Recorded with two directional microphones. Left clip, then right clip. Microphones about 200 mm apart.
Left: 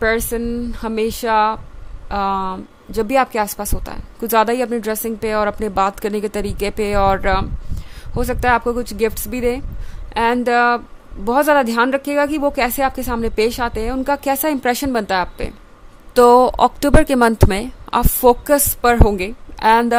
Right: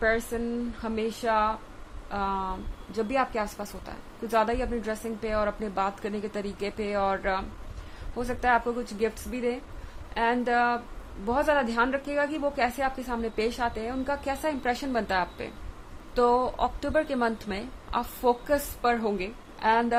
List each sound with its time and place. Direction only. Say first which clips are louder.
0.0 s a woman's voice: left 8 dB; 55° left (ahead or behind)